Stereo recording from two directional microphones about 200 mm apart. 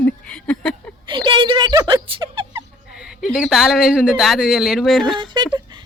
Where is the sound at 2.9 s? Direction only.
Centre (ahead or behind).